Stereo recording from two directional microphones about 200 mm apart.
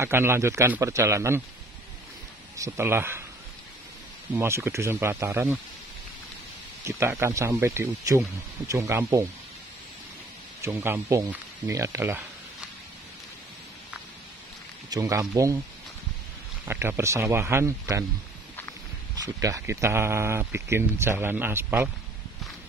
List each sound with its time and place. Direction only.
0.0 s speech: 10° right (ahead or behind)
2.5 s speech: 15° right (ahead or behind)
4.3 s speech: 10° right (ahead or behind)
6.8 s speech: 15° right (ahead or behind)
10.6 s speech: 10° right (ahead or behind)
14.9 s speech: 20° right (ahead or behind)
16.6 s speech: 10° right (ahead or behind)
19.2 s speech: 15° right (ahead or behind)